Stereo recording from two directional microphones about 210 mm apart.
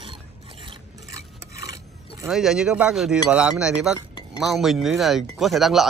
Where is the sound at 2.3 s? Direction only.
Centre (ahead or behind).